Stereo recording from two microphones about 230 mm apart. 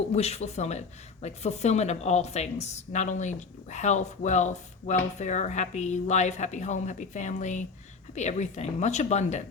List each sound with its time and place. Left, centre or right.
0.1 s a woman's voice: left